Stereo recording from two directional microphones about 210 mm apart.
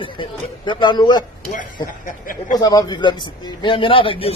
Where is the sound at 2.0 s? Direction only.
40° left (ahead or behind).